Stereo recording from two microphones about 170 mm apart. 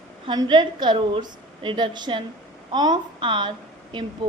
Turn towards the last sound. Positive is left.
turn(degrees=-30)  # may be behind; listen again after turning